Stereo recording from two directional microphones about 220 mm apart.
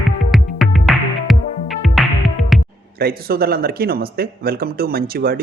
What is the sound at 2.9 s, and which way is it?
Speech, 45° right (ahead or behind).